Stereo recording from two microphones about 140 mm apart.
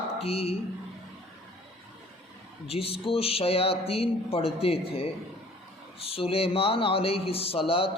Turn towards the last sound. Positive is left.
turn(degrees=40)  # may be behind; listen again after turning